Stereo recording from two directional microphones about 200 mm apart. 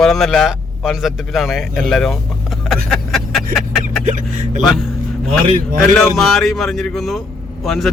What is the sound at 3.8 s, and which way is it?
Vehicle, 40° right (ahead or behind).